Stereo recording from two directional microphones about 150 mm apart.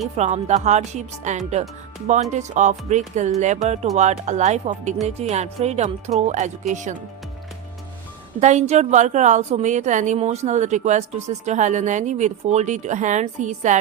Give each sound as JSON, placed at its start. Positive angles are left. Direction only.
{"t": 0.2, "sound": "a woman's voice", "side_deg": -50}
{"t": 8.4, "sound": "a woman's voice", "side_deg": -50}